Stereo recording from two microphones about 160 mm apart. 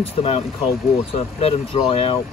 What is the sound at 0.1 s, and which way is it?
Speech, 40° left (ahead or behind).